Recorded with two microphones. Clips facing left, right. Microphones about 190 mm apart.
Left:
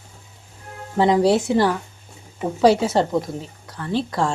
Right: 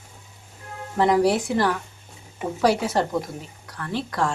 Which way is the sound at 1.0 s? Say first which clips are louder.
Left 3 dB; 25° left (ahead or behind).